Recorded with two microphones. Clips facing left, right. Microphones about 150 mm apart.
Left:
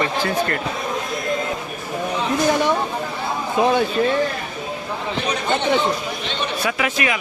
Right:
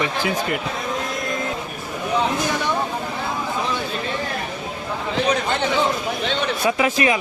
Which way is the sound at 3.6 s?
60° left (ahead or behind).